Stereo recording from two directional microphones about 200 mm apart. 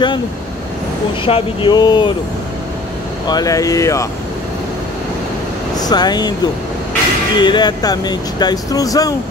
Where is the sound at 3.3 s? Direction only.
20° left (ahead or behind).